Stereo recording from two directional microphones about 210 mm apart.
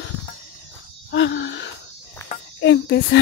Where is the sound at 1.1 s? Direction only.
55° left (ahead or behind).